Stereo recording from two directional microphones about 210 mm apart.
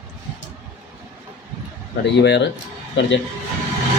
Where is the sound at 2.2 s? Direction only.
55° left (ahead or behind).